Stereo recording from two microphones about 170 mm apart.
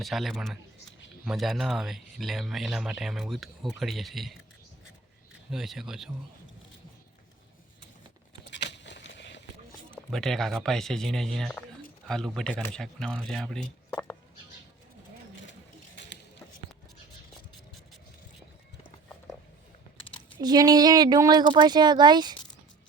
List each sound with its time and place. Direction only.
0.0 s speech: centre (ahead or behind)
5.5 s speech: centre (ahead or behind)
8.6 s a sound: 90° left
9.9 s speech: centre (ahead or behind)
20.4 s speech: 25° right (ahead or behind)